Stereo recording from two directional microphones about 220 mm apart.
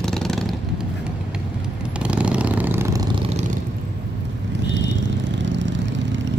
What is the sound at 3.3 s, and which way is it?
Vehicle, 30° right (ahead or behind).